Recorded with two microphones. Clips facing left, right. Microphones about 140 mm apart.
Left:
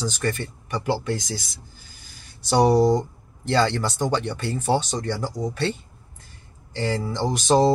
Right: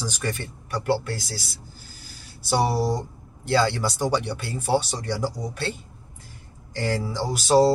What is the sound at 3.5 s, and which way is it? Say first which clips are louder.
Speech: left 1 dB; 5° right (ahead or behind).